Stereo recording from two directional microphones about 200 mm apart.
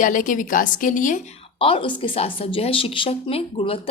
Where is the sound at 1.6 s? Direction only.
25° left (ahead or behind).